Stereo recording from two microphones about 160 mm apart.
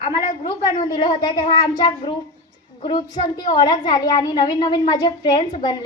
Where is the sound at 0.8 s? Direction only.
30° left (ahead or behind).